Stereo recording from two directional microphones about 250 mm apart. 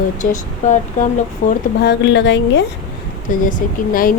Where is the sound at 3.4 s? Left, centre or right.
Left.